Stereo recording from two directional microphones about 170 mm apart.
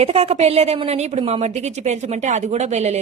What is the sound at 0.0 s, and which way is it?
A woman's voice, 35° right (ahead or behind).